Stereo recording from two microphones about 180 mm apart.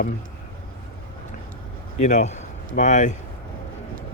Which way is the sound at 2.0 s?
40° left (ahead or behind).